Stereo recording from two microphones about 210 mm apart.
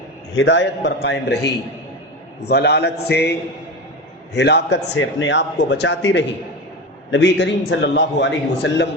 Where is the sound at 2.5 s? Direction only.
50° left (ahead or behind).